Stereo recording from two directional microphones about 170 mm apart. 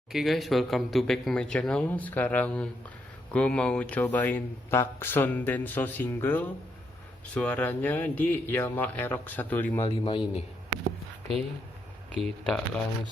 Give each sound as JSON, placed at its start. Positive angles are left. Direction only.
{"t": 0.1, "sound": "speech", "side_deg": 0}
{"t": 9.8, "sound": "a man's voice", "side_deg": 30}
{"t": 12.1, "sound": "speech", "side_deg": 5}